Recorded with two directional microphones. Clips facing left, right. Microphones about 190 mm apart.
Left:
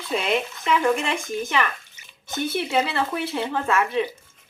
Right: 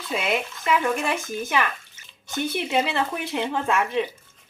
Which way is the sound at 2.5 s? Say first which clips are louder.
Left 1 dB; 15° right (ahead or behind).